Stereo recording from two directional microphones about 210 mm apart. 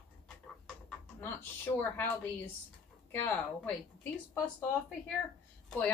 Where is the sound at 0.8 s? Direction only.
10° left (ahead or behind).